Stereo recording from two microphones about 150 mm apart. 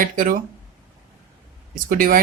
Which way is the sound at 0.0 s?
65° right (ahead or behind).